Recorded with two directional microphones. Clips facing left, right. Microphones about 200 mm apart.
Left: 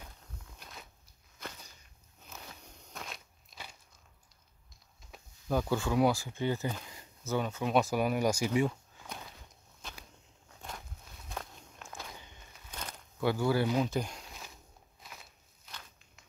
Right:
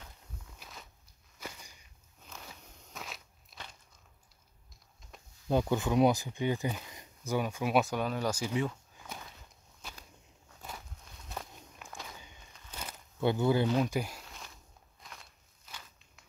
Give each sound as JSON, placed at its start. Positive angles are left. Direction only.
{"t": 0.6, "sound": "walk", "side_deg": 0}
{"t": 1.4, "sound": "a sound", "side_deg": -10}
{"t": 2.2, "sound": "walk", "side_deg": 0}
{"t": 5.5, "sound": "speech", "side_deg": -20}
{"t": 7.9, "sound": "speech", "side_deg": 10}
{"t": 8.5, "sound": "a sound", "side_deg": 10}
{"t": 9.8, "sound": "a sound", "side_deg": -5}
{"t": 11.2, "sound": "walk", "side_deg": -5}
{"t": 13.2, "sound": "speech", "side_deg": -20}
{"t": 13.8, "sound": "speech", "side_deg": -5}
{"t": 14.2, "sound": "walk", "side_deg": 5}